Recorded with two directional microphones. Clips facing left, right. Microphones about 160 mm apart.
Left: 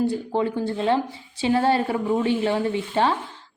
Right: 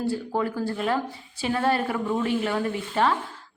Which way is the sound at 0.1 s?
25° left (ahead or behind).